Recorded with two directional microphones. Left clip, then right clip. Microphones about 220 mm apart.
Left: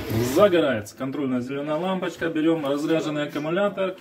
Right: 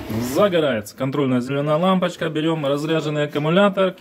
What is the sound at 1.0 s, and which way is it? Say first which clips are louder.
A man's voice: right 7 dB; 50° right (ahead or behind).